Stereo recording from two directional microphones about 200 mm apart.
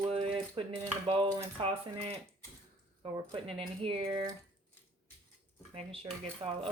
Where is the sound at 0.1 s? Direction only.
25° right (ahead or behind).